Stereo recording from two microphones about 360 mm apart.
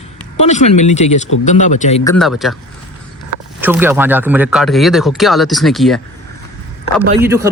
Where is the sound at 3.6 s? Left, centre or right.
Centre.